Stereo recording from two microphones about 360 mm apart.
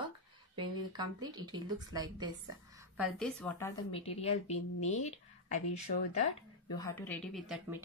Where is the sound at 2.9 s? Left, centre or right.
Centre.